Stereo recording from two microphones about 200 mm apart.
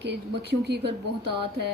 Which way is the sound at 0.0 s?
55° right (ahead or behind).